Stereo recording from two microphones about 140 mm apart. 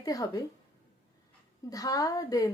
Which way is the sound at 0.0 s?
25° left (ahead or behind).